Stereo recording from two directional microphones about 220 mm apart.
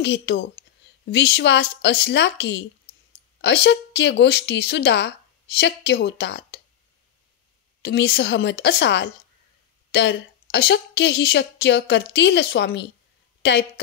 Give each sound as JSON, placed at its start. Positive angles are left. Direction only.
{"t": 0.0, "sound": "a woman's voice", "side_deg": 50}
{"t": 7.8, "sound": "a woman's voice", "side_deg": 50}